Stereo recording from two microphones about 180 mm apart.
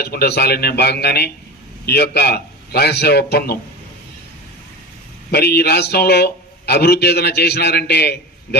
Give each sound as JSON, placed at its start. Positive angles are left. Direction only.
{"t": 0.0, "sound": "a man's voice", "side_deg": 60}
{"t": 5.3, "sound": "a man's voice", "side_deg": 60}